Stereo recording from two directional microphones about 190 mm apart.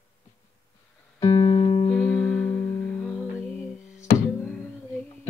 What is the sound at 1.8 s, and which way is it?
Music, 5° left (ahead or behind).